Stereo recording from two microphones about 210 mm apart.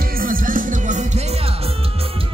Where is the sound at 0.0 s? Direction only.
45° right (ahead or behind).